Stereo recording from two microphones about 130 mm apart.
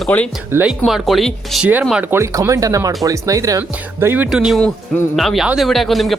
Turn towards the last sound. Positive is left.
turn(degrees=0)  # may be behind; listen again after turning